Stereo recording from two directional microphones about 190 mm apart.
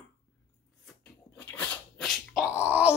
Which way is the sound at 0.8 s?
5° left (ahead or behind).